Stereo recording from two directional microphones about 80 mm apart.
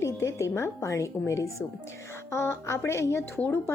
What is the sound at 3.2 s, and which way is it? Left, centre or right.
Speech, left.